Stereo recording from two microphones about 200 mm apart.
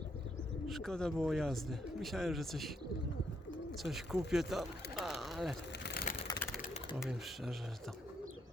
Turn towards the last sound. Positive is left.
turn(degrees=0)  # may be behind; listen again after turning